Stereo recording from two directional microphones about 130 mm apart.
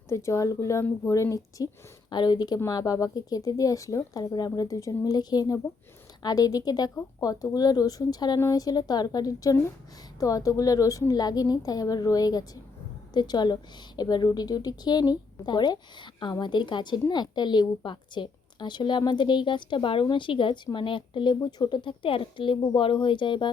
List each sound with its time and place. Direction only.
0.1 s a woman's voice: 20° left (ahead or behind)